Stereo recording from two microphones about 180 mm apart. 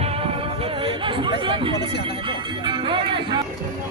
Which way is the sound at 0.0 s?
30° right (ahead or behind).